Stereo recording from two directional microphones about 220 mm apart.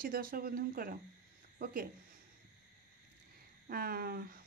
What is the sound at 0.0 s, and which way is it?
Speech, 40° right (ahead or behind).